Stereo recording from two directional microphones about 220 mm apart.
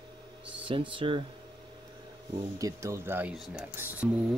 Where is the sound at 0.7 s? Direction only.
25° right (ahead or behind).